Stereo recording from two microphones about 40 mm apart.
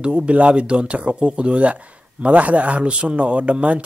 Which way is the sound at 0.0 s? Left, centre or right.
Right.